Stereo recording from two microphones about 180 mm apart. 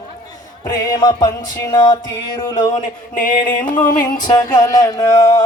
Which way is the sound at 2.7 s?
45° left (ahead or behind).